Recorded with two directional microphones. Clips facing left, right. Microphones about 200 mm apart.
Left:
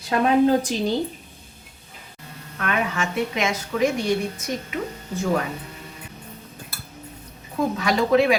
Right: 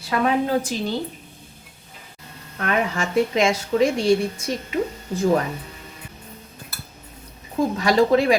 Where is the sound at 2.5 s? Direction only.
35° right (ahead or behind).